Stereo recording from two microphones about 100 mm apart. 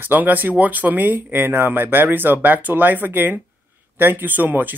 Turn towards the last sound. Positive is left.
turn(degrees=-15)  # may be behind; listen again after turning